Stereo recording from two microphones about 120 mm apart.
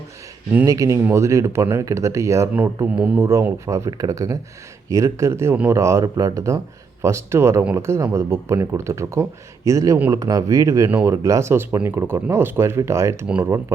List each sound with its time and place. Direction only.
0.6 s speech: 30° right (ahead or behind)
2.8 s speech: 10° right (ahead or behind)
3.2 s speech: 25° right (ahead or behind)
13.2 s speech: 10° right (ahead or behind)